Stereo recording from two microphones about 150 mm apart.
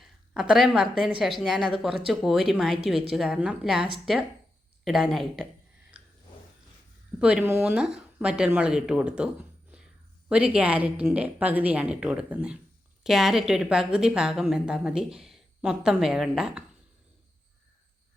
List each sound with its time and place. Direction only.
0.0 s a woman's voice: 5° right (ahead or behind)
4.9 s a woman's voice: centre (ahead or behind)
7.2 s a woman's voice: 5° right (ahead or behind)